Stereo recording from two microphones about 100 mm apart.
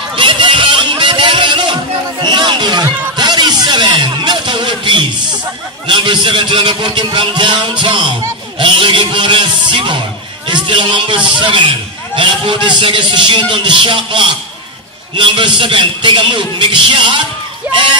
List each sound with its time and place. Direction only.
0.1 s music: 55° right (ahead or behind)
5.9 s a man's voice: 55° right (ahead or behind)
17.7 s speech: 20° right (ahead or behind)